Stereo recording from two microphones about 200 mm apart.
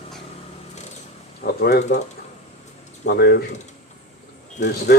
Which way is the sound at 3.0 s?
55° left (ahead or behind).